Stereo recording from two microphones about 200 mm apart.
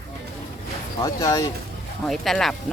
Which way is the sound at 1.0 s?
15° left (ahead or behind).